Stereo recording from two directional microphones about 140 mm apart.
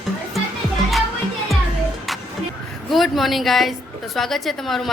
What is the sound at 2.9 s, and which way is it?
Speech, centre (ahead or behind).